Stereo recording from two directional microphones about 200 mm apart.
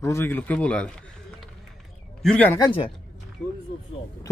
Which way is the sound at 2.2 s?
5° left (ahead or behind).